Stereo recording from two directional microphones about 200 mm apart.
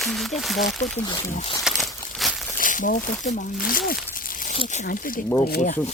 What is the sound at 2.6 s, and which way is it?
Speech, 40° left (ahead or behind).